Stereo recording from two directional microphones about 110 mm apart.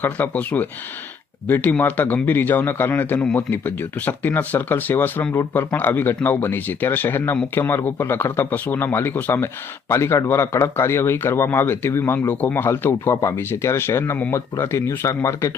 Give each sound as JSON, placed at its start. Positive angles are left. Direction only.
{"t": 0.0, "sound": "speech", "side_deg": 15}